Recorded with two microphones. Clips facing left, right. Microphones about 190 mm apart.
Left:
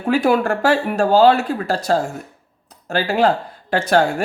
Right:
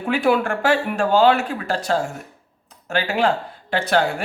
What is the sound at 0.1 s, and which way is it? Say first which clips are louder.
Speech: left 3 dB; 40° left (ahead or behind).